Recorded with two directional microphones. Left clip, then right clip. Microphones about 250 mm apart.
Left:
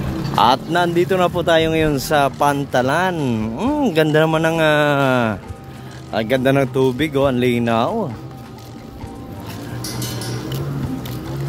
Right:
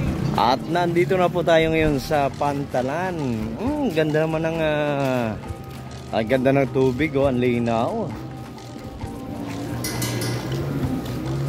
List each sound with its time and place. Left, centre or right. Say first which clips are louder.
0.4 s speech: left 5 dB; centre